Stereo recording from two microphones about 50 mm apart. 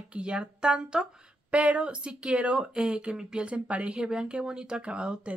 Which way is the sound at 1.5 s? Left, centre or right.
Right.